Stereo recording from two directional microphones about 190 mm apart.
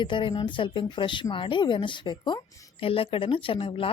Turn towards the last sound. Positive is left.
turn(degrees=30)  # may be behind; listen again after turning